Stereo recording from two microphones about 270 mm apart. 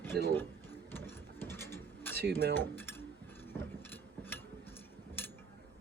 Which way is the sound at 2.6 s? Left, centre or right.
Centre.